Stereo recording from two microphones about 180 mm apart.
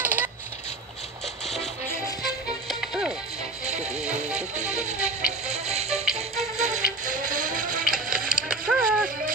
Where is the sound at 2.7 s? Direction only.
Centre (ahead or behind).